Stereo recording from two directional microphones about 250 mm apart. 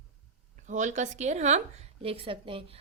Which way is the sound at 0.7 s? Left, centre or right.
Right.